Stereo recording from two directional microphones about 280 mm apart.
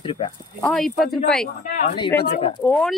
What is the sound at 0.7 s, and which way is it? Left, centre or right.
Speech, centre.